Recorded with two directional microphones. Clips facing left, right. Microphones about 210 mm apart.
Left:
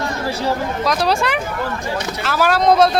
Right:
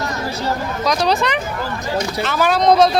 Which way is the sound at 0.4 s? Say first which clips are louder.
Even; 5° left (ahead or behind).